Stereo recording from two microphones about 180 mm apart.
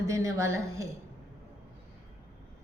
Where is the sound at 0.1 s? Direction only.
15° right (ahead or behind).